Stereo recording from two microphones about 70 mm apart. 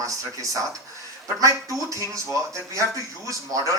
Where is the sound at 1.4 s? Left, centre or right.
Right.